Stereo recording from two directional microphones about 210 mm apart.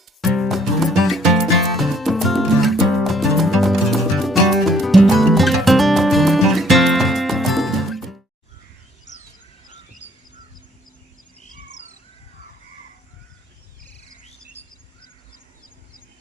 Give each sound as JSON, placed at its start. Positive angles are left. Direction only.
{"t": 0.2, "sound": "music", "side_deg": 0}
{"t": 9.1, "sound": "bird", "side_deg": 35}
{"t": 10.0, "sound": "crow", "side_deg": 35}
{"t": 14.6, "sound": "bird", "side_deg": 30}